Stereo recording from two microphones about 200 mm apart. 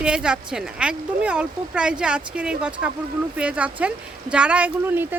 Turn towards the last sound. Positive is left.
turn(degrees=-10)  # may be behind; listen again after turning